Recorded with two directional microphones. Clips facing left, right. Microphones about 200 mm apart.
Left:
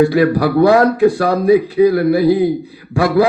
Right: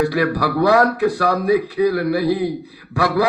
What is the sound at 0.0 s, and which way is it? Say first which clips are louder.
A man's voice: left 6 dB; 25° left (ahead or behind).